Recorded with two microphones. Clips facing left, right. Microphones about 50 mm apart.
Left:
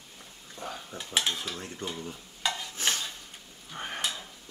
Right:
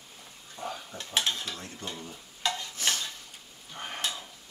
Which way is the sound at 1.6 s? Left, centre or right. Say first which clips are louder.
Left 3 dB; left.